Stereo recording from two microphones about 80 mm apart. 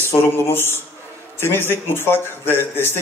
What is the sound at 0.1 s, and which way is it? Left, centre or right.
A man's voice, left.